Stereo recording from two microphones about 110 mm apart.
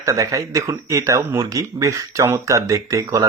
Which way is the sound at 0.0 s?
30° right (ahead or behind).